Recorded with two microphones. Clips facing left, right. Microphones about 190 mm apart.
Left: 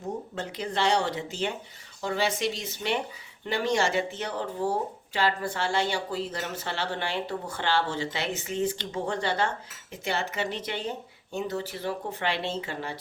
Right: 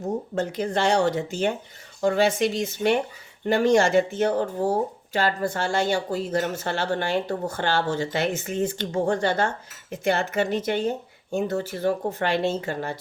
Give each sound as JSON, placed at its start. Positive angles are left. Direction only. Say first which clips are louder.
{"t": 0.3, "sound": "speech", "louder": "right 6 dB", "side_deg": -45}